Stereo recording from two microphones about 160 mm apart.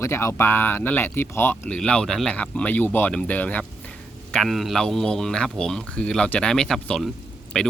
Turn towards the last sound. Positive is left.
turn(degrees=5)  # may be behind; listen again after turning